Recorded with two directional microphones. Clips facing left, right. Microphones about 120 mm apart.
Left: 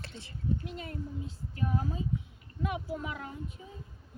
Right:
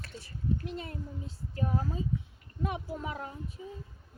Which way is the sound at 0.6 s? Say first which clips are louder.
Right 2 dB; 35° right (ahead or behind).